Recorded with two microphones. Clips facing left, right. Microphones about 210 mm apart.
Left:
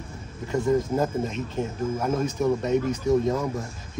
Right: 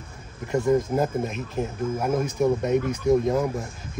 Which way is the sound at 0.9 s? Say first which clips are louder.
Even; 10° right (ahead or behind).